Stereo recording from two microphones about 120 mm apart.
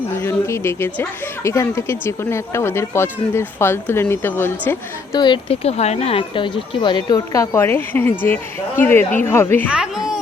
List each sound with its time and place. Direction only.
0.2 s speech: 20° left (ahead or behind)
5.1 s speech: 40° left (ahead or behind)
5.6 s speech: 65° left (ahead or behind); by 7.4 s 35° left (ahead or behind)
7.5 s speech: 20° left (ahead or behind)
9.6 s speech: 5° right (ahead or behind)